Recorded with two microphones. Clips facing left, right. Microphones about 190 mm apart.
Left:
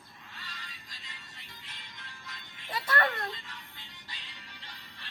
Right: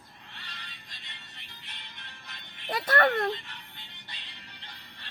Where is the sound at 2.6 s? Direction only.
60° right (ahead or behind).